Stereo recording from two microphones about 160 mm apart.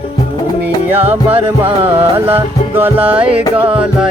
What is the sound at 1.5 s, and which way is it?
Music, 10° right (ahead or behind).